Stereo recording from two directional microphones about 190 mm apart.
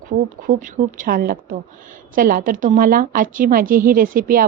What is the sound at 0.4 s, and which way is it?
A woman's voice, 45° right (ahead or behind).